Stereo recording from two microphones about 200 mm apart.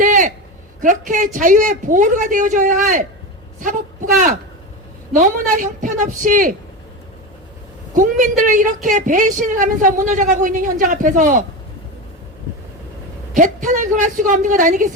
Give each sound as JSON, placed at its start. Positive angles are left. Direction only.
{"t": 0.0, "sound": "a sound", "side_deg": -40}
{"t": 0.8, "sound": "a woman's voice", "side_deg": -40}
{"t": 7.9, "sound": "a woman's voice", "side_deg": -40}
{"t": 13.3, "sound": "a woman's voice", "side_deg": -40}